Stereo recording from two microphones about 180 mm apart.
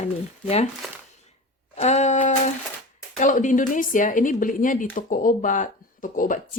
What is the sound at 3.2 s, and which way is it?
Speech, 45° left (ahead or behind).